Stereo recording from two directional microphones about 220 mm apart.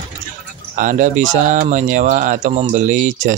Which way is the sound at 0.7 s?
35° right (ahead or behind).